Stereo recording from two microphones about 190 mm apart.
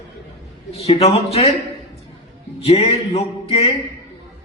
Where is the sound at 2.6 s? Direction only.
30° left (ahead or behind).